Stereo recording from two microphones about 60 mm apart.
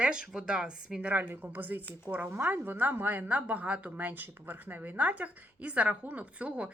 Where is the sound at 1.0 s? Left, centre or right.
Right.